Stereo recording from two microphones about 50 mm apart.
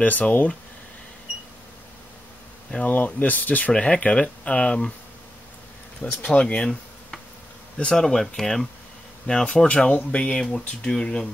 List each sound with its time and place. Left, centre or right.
0.0 s speech: left
2.8 s speech: left
3.7 s speech: left
6.0 s speech: left
6.4 s speech: centre
7.8 s speech: centre